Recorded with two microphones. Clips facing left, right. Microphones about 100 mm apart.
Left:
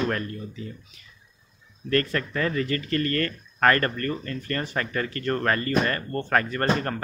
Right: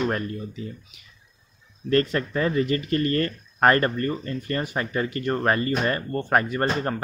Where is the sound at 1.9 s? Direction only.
20° right (ahead or behind).